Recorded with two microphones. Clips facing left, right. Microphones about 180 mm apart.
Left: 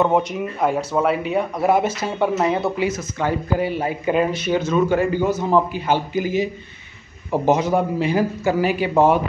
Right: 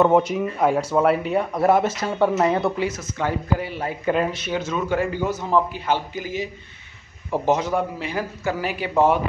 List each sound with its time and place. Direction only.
0.0 s a man's voice: 5° right (ahead or behind)
7.7 s a man's voice: 20° left (ahead or behind)
8.5 s a man's voice: 5° left (ahead or behind)